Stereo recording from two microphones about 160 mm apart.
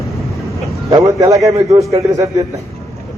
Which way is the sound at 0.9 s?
20° right (ahead or behind).